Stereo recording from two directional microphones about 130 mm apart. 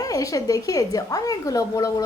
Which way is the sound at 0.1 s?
25° left (ahead or behind).